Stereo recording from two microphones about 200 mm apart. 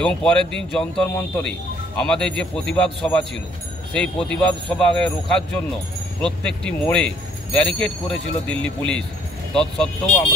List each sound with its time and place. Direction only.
0.0 s speech: 5° left (ahead or behind)